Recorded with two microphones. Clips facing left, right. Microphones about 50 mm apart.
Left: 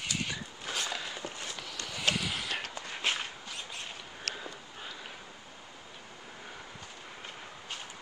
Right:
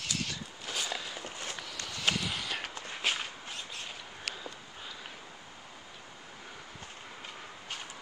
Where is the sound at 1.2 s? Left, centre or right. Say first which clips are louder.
Even; right.